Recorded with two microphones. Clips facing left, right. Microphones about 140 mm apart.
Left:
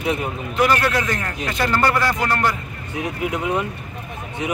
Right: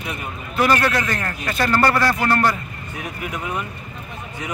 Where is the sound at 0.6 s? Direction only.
5° left (ahead or behind).